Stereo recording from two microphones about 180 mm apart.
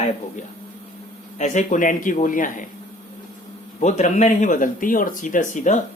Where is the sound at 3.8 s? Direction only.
40° left (ahead or behind).